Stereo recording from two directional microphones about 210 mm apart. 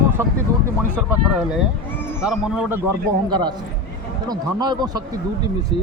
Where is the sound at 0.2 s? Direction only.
10° right (ahead or behind).